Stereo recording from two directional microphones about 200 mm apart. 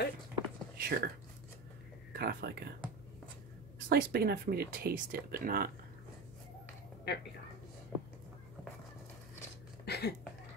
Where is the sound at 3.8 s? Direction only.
50° right (ahead or behind).